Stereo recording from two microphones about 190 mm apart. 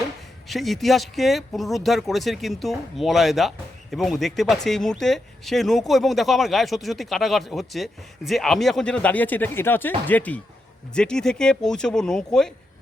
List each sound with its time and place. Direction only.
0.4 s speech: centre (ahead or behind)